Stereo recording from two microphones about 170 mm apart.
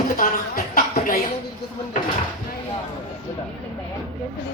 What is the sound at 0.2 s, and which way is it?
A woman's voice, 55° left (ahead or behind).